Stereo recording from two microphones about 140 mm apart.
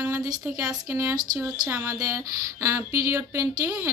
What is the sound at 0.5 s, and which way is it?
Speech, 25° right (ahead or behind).